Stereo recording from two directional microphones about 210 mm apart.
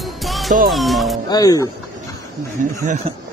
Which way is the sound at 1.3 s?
15° left (ahead or behind).